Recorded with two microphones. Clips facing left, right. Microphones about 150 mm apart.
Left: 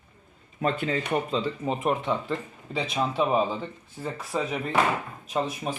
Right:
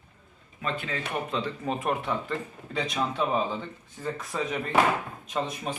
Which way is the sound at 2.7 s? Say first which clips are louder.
Left 2 dB; 5° left (ahead or behind).